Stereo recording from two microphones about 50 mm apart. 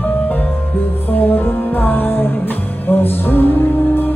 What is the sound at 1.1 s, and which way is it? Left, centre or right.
Music, left.